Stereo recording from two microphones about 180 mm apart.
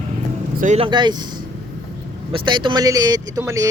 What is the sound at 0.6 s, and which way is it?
Speech, 40° right (ahead or behind).